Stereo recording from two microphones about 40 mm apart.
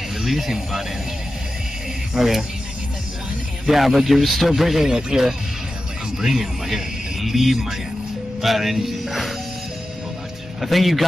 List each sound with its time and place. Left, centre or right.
0.2 s music: centre
2.1 s music: centre
3.6 s music: centre
4.5 s speech: centre
8.4 s music: centre
10.6 s music: centre